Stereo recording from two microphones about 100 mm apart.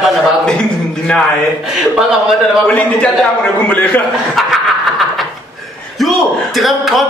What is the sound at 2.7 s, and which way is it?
A man's voice, 10° left (ahead or behind).